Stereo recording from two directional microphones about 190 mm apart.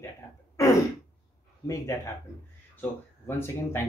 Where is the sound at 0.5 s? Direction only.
15° left (ahead or behind).